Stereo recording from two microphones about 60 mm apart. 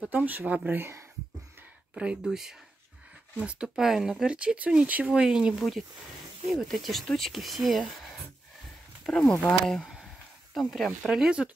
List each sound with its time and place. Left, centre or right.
0.1 s speech: right
2.2 s speech: centre
3.3 s speech: centre
3.6 s speech: centre
4.3 s speech: centre
5.6 s speech: centre
9.0 s speech: centre
10.0 s a sound: centre
11.1 s speech: centre